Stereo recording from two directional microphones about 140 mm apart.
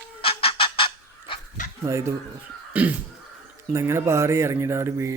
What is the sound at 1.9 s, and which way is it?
Speech, 20° right (ahead or behind).